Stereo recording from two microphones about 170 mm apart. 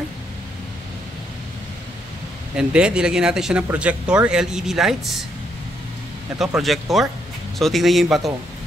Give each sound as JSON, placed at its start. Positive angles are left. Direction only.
{"t": 2.5, "sound": "speech", "side_deg": -5}
{"t": 6.3, "sound": "speech", "side_deg": -5}